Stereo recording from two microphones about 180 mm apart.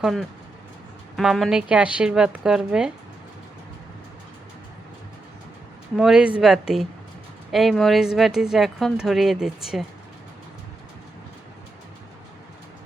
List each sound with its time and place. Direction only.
0.0 s speech: centre (ahead or behind)
6.0 s speech: 5° right (ahead or behind)